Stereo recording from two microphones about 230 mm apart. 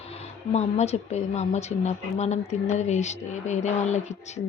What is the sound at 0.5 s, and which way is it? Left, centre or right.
Speech, left.